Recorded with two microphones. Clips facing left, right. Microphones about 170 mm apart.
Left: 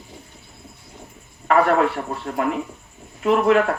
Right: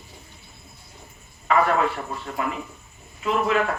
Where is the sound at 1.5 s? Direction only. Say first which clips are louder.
Left 4 dB; 60° left (ahead or behind).